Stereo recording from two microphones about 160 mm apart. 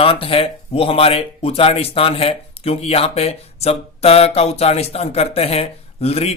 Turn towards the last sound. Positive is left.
turn(degrees=40)  # may be behind; listen again after turning